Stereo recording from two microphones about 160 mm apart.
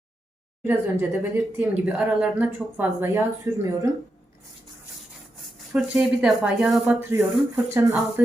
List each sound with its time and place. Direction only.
0.6 s speech: 15° right (ahead or behind)
5.7 s speech: 5° right (ahead or behind)
7.1 s speech: 15° right (ahead or behind)